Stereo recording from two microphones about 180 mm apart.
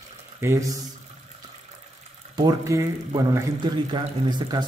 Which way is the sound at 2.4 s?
20° right (ahead or behind).